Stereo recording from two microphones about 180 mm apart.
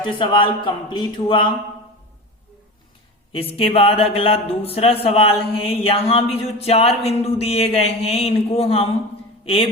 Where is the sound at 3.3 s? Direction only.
30° left (ahead or behind).